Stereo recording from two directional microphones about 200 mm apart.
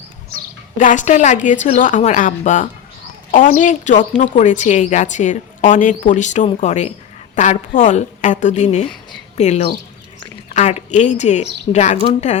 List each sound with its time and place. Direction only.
0.8 s a woman's voice: 40° left (ahead or behind)